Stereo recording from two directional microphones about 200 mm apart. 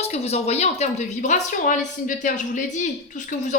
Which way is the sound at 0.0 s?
30° left (ahead or behind).